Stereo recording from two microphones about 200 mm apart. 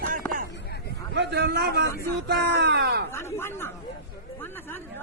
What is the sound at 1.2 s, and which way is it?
Speech, 55° right (ahead or behind).